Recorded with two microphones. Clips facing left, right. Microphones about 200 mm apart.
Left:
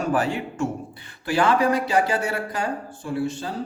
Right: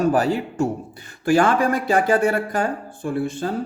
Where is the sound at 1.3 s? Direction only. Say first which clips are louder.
Right 3 dB; 50° right (ahead or behind).